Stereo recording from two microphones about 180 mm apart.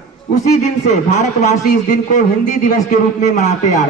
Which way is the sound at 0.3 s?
40° left (ahead or behind).